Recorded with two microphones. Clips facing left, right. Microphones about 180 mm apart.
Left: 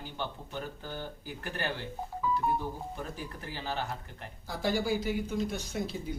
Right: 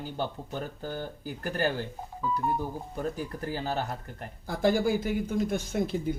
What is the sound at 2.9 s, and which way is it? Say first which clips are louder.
Speech: right 7 dB; 45° right (ahead or behind).